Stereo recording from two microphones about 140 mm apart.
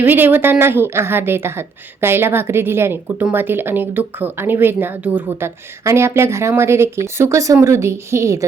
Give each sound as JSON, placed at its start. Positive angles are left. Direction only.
{"t": 0.0, "sound": "a woman's voice", "side_deg": -15}